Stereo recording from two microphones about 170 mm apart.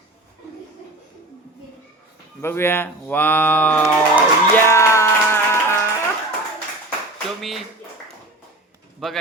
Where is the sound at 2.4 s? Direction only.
15° left (ahead or behind).